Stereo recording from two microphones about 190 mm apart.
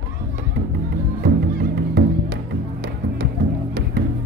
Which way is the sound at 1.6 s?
55° right (ahead or behind).